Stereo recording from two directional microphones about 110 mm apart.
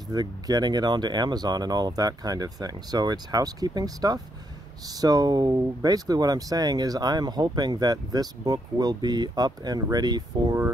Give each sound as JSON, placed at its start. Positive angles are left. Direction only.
{"t": 0.1, "sound": "speech", "side_deg": -40}